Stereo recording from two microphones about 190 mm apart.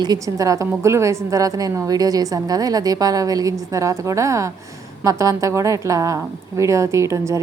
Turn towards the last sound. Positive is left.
turn(degrees=-15)  # may be behind; listen again after turning